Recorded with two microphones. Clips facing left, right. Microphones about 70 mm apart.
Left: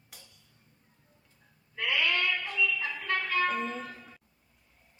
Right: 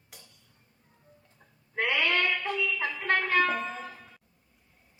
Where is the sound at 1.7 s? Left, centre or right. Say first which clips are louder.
Right 3 dB; right.